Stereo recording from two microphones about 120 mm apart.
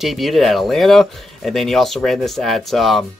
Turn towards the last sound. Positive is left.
turn(degrees=0)  # may be behind; listen again after turning